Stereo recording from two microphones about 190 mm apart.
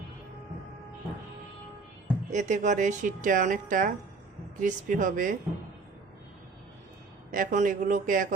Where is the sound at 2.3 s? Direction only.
40° right (ahead or behind).